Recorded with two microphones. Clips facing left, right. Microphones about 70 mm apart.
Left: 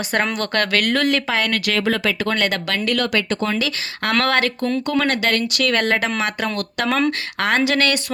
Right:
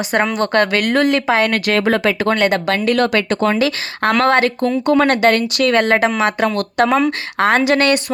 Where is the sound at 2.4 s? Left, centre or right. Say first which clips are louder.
Right 6 dB; right.